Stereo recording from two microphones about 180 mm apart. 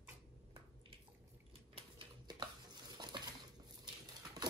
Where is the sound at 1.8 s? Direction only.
25° right (ahead or behind).